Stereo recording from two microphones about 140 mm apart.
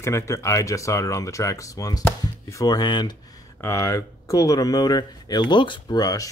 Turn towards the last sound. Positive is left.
turn(degrees=25)  # may be behind; listen again after turning